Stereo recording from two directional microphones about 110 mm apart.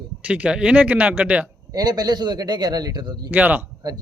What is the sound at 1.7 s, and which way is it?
A man's voice, 35° right (ahead or behind).